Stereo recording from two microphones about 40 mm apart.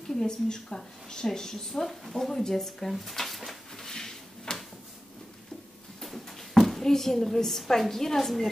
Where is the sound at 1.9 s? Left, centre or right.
Centre.